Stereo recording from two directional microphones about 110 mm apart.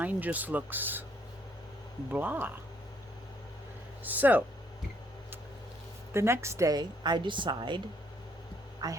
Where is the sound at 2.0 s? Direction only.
15° right (ahead or behind).